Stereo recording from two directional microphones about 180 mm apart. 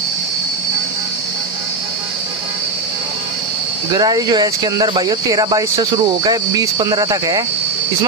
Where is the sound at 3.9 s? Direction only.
20° right (ahead or behind).